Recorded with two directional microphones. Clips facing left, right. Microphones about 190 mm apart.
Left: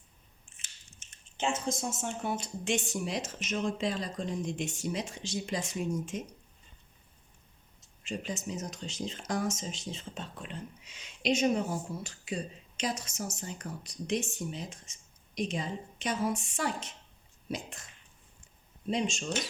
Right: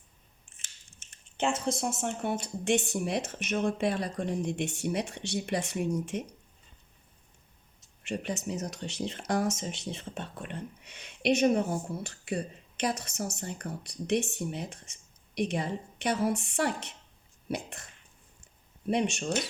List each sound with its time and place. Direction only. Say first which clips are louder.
1.4 s speech: right 3 dB; 65° right (ahead or behind)
8.0 s speech: right 3 dB; 65° right (ahead or behind)
18.9 s speech: right 3 dB; 65° right (ahead or behind)